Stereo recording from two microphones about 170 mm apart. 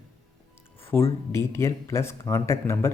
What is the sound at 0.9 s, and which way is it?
Speech, 15° left (ahead or behind).